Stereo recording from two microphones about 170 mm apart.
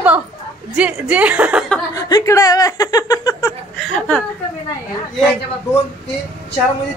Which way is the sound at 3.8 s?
5° left (ahead or behind).